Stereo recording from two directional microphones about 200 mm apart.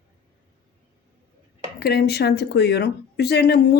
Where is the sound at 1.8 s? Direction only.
50° left (ahead or behind).